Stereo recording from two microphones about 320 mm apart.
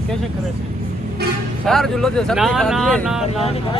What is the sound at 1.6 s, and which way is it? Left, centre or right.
Speech, centre.